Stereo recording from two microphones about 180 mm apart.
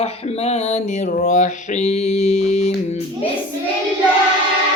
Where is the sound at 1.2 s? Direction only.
40° left (ahead or behind).